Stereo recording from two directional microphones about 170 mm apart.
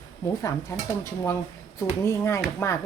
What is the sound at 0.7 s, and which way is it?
Speech, 15° left (ahead or behind).